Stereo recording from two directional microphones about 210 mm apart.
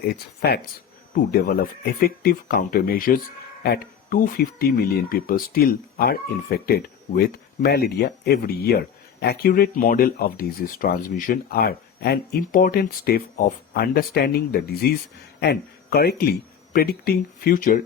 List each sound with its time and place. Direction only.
0.0 s speech: 50° left (ahead or behind)